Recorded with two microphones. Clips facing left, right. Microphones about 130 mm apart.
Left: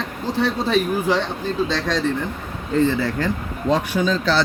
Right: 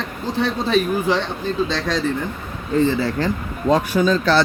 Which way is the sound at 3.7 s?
45° right (ahead or behind).